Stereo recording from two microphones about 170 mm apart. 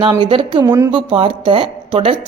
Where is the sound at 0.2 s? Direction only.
30° right (ahead or behind).